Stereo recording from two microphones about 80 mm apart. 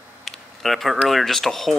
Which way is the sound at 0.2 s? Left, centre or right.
Centre.